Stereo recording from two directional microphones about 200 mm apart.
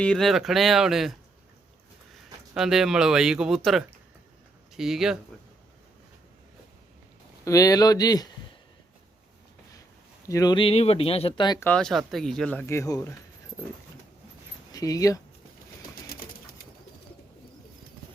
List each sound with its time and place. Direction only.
0.0 s speech: 5° left (ahead or behind)
2.6 s speech: centre (ahead or behind)
7.4 s speech: 15° left (ahead or behind)
10.2 s speech: 15° left (ahead or behind)
11.7 s speech: centre (ahead or behind)
14.7 s speech: 15° left (ahead or behind)
16.0 s bird: 50° left (ahead or behind)